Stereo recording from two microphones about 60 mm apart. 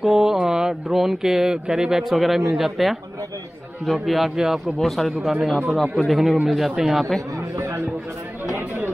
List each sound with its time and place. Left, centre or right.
0.0 s speech: centre
8.5 s chatter: right